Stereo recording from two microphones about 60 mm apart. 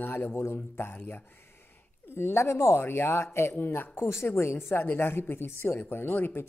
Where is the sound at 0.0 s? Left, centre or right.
Left.